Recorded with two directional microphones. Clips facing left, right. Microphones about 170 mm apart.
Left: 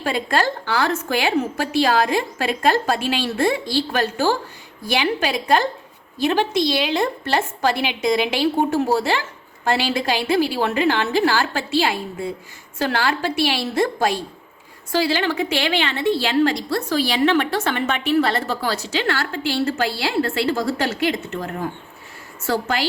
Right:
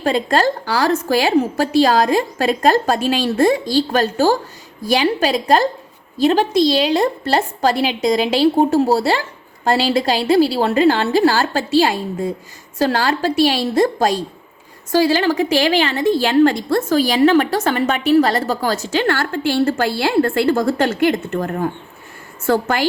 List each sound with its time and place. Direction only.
0.0 s a woman's voice: 40° right (ahead or behind)